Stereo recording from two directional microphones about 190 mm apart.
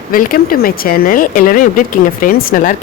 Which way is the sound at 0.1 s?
50° left (ahead or behind).